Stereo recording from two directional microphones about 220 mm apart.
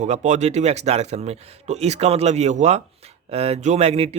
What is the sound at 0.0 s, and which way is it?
Speech, 30° right (ahead or behind).